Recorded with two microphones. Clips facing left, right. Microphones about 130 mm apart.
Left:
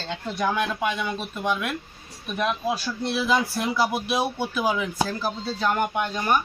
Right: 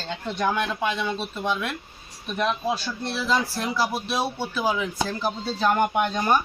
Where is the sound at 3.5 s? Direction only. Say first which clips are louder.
Left 2 dB; 20° left (ahead or behind).